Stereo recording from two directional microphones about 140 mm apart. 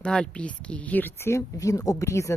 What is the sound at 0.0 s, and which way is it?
A woman's voice, 10° left (ahead or behind).